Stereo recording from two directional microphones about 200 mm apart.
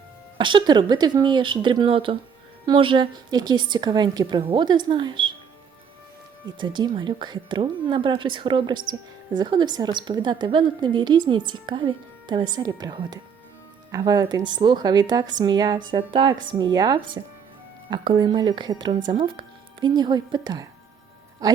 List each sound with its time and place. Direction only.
0.3 s a woman's voice: 25° right (ahead or behind)
6.4 s a woman's voice: 20° right (ahead or behind)